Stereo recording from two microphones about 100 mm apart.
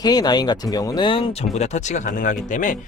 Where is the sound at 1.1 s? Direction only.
65° left (ahead or behind).